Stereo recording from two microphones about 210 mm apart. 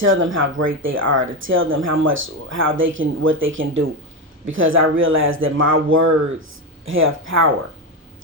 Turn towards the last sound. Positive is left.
turn(degrees=-70)  # may be behind; listen again after turning